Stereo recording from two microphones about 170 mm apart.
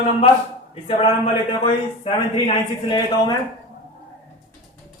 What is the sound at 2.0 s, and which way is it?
A man's voice, 30° left (ahead or behind).